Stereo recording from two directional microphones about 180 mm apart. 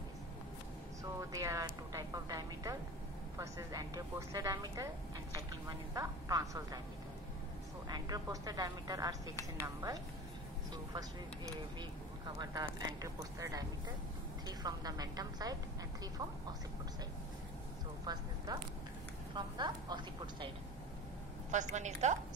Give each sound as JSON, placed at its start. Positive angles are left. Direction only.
{"t": 1.3, "sound": "a woman's voice", "side_deg": -20}
{"t": 7.9, "sound": "speech", "side_deg": -20}
{"t": 18.0, "sound": "speech", "side_deg": -20}
{"t": 21.5, "sound": "a woman's voice", "side_deg": -40}